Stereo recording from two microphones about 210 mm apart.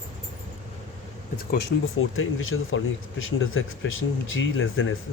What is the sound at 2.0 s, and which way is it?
Speech, 75° left (ahead or behind).